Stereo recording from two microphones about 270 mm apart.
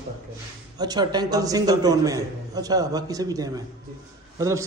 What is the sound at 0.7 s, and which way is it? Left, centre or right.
A man's voice, centre.